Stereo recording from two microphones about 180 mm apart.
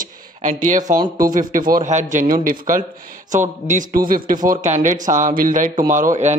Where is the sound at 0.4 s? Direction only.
45° right (ahead or behind).